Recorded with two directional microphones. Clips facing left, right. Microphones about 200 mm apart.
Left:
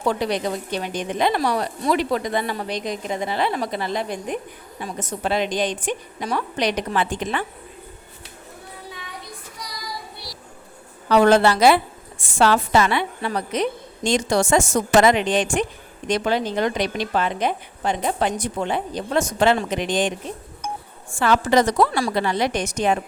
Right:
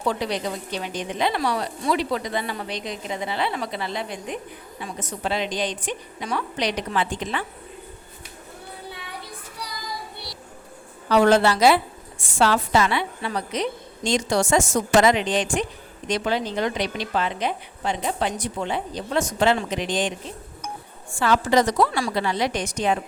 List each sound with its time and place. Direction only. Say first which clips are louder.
0.2 s a woman's voice: left 3 dB; 50° left (ahead or behind)
11.1 s a woman's voice: left 2 dB; 55° left (ahead or behind)
21.2 s a woman's voice: left 2 dB; 60° left (ahead or behind)